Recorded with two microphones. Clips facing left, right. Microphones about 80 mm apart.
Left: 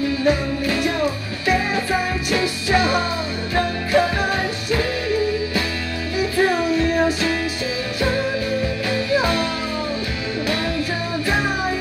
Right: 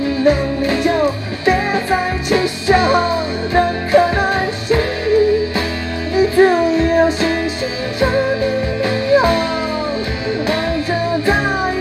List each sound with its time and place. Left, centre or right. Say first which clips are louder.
0.2 s music: right 8 dB; right
8.8 s music: right 9 dB; right